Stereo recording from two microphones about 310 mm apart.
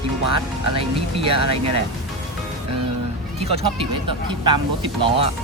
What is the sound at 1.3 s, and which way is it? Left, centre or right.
Speech, right.